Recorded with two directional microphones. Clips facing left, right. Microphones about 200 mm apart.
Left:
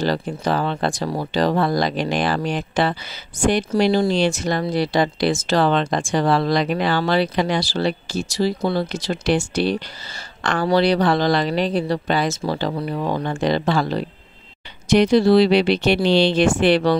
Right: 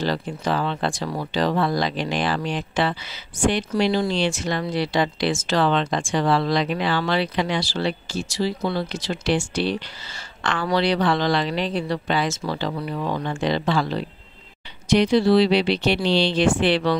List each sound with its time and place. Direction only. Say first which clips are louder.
0.0 s speech: left 3 dB; 40° left (ahead or behind)